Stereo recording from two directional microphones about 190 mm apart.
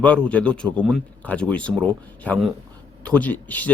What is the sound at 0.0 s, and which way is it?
Speech, 5° left (ahead or behind).